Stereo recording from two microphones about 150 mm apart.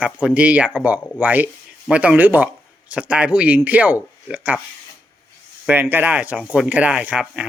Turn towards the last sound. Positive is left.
turn(degrees=-5)  # may be behind; listen again after turning